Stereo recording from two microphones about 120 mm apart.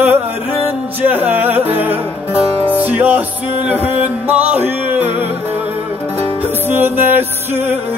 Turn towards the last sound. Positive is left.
turn(degrees=-15)  # may be behind; listen again after turning